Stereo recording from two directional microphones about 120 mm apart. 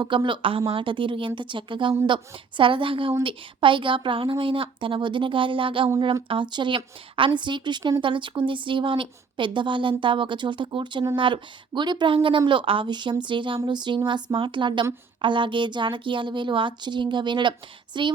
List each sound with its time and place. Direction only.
0.0 s a woman's voice: 40° right (ahead or behind)